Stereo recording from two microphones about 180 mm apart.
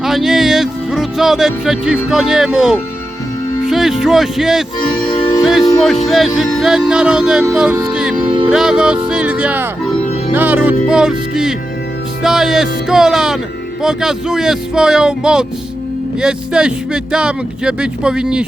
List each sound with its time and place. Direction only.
0.0 s music: centre (ahead or behind)
3.7 s speech: centre (ahead or behind)
9.0 s music: 5° right (ahead or behind)
12.2 s speech: 5° right (ahead or behind)